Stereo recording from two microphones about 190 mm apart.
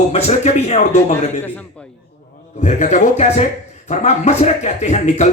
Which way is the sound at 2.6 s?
40° left (ahead or behind).